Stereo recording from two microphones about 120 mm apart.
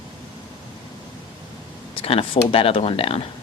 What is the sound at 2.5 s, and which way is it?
Speech, 50° left (ahead or behind).